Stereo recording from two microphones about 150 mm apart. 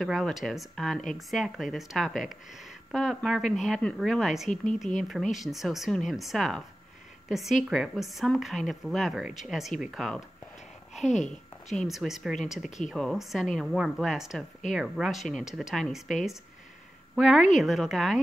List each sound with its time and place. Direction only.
0.0 s speech: centre (ahead or behind)
11.1 s speech: 50° left (ahead or behind)
11.7 s speech: centre (ahead or behind)